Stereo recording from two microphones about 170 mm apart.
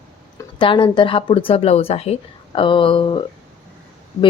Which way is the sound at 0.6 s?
30° left (ahead or behind).